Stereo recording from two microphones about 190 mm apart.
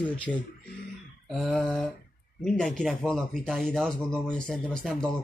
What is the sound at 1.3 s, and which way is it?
Speech, centre (ahead or behind).